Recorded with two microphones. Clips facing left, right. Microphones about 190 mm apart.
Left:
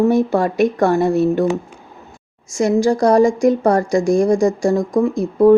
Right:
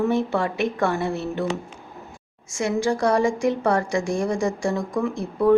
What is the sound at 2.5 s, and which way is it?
A woman's voice, 35° left (ahead or behind).